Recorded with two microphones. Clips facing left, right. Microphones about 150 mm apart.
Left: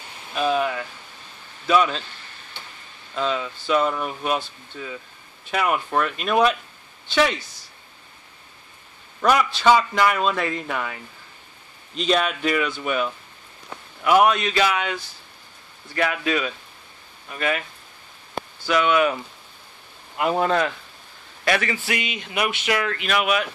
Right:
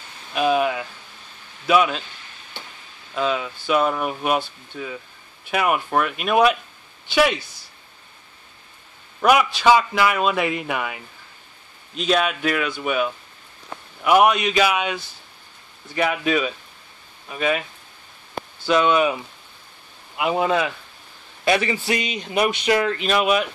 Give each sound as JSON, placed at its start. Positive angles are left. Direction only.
{"t": 0.3, "sound": "a man's voice", "side_deg": -15}
{"t": 3.2, "sound": "a man's voice", "side_deg": -10}
{"t": 5.5, "sound": "a man's voice", "side_deg": -10}
{"t": 9.2, "sound": "a man's voice", "side_deg": -10}
{"t": 18.7, "sound": "speech", "side_deg": -25}
{"t": 20.2, "sound": "a man's voice", "side_deg": -5}
{"t": 21.5, "sound": "speech", "side_deg": -20}
{"t": 21.9, "sound": "speech", "side_deg": -35}